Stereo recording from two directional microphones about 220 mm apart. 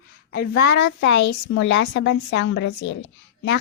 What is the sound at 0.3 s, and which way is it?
Speech, 45° left (ahead or behind).